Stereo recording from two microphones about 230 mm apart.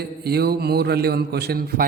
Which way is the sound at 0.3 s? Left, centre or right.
Right.